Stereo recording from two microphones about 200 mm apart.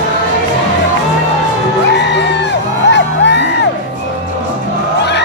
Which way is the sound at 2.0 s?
60° left (ahead or behind).